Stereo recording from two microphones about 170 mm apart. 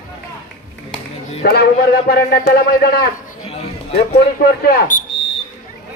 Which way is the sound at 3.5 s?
35° left (ahead or behind).